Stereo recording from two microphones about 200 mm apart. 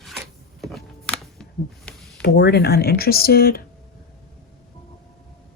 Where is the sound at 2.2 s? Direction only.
55° left (ahead or behind).